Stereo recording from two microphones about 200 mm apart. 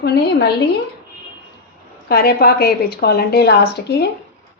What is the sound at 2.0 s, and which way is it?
A woman's voice, 50° left (ahead or behind).